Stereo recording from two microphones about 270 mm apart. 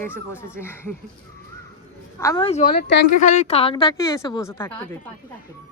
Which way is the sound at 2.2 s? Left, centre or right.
Centre.